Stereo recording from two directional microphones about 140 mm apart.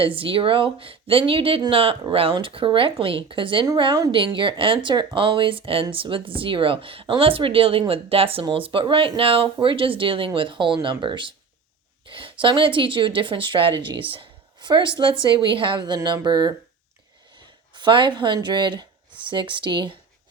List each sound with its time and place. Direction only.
0.0 s speech: 40° right (ahead or behind)
17.7 s speech: 35° right (ahead or behind)